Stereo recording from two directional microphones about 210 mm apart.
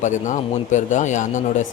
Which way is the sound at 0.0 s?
35° left (ahead or behind).